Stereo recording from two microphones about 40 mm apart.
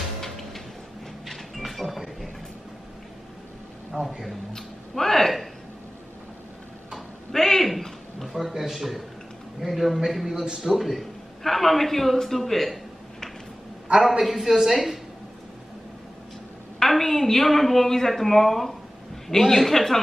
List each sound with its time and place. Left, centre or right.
1.2 s a sound: centre
3.9 s speech: right
4.6 s speech: centre
7.3 s a sound: centre
9.6 s a man's voice: centre
13.9 s a man's voice: centre
16.8 s a woman's voice: centre